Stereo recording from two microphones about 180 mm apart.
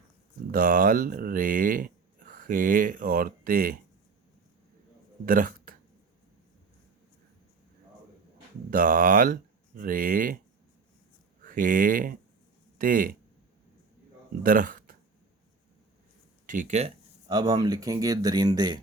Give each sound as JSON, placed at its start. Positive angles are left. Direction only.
{"t": 0.5, "sound": "speech", "side_deg": -50}
{"t": 5.2, "sound": "a man's voice", "side_deg": -50}
{"t": 8.7, "sound": "speech", "side_deg": -50}
{"t": 11.4, "sound": "speech", "side_deg": -50}
{"t": 14.4, "sound": "speech", "side_deg": -50}
{"t": 16.5, "sound": "speech", "side_deg": -45}
{"t": 17.2, "sound": "speech", "side_deg": -20}